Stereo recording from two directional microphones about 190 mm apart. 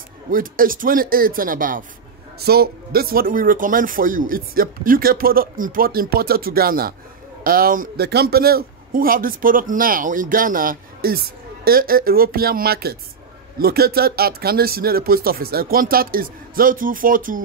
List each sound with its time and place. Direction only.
0.3 s speech: 45° right (ahead or behind)